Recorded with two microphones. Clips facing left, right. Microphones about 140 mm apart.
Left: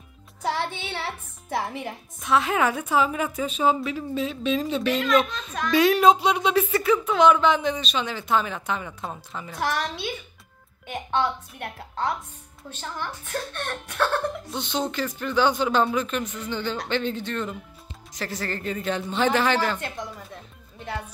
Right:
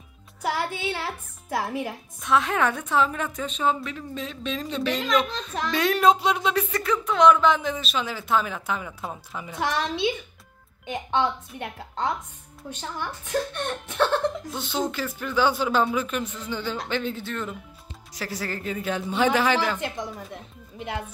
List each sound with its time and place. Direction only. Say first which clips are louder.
0.4 s a woman's voice: even; 5° right (ahead or behind)
5.0 s a child's voice: left 2 dB; 25° right (ahead or behind)
5.7 s a woman's voice: left 3 dB; centre (ahead or behind)
12.6 s a man's voice: right 1 dB; 15° right (ahead or behind)
14.5 s a man's voice: even; 5° right (ahead or behind)